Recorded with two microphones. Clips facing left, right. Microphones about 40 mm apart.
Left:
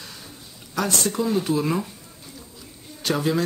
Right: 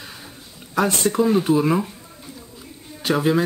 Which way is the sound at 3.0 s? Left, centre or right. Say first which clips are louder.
Right 4 dB; centre.